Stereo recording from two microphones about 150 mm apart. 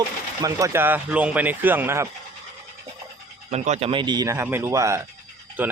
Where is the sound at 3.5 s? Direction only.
50° right (ahead or behind).